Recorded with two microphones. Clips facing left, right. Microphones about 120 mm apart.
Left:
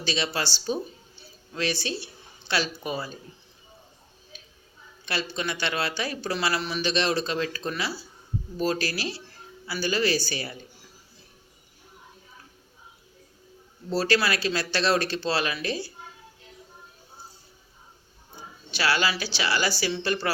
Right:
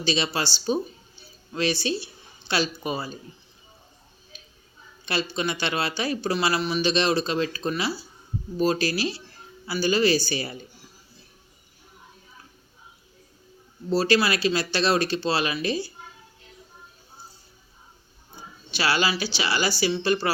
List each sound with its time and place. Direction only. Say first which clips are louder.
0.0 s speech: right 3 dB; 20° right (ahead or behind)
2.5 s speech: right 2 dB; 20° right (ahead or behind)
5.0 s speech: right 3 dB; 20° right (ahead or behind)
13.9 s speech: right 3 dB; 15° right (ahead or behind)
18.8 s speech: right 1 dB; 20° right (ahead or behind)